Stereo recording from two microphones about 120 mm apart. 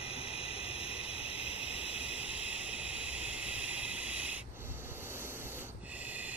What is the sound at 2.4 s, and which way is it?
Vehicle, 10° right (ahead or behind).